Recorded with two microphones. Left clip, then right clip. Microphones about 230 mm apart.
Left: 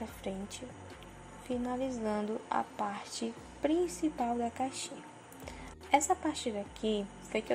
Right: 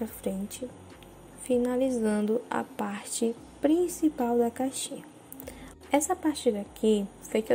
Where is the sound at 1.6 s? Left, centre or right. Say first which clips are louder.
Right 8 dB; centre.